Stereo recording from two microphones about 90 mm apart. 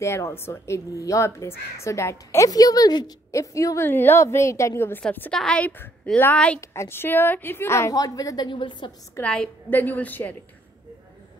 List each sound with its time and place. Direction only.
0.0 s a woman's voice: 30° left (ahead or behind); by 3.1 s 45° left (ahead or behind)
3.3 s a woman's voice: 35° left (ahead or behind)
3.8 s a woman's voice: 25° left (ahead or behind)
5.3 s a woman's voice: 10° left (ahead or behind)
6.6 s a woman's voice: 30° left (ahead or behind)
7.9 s a woman's voice: 45° left (ahead or behind)
8.5 s a woman's voice: 60° left (ahead or behind)
9.2 s a woman's voice: 15° left (ahead or behind)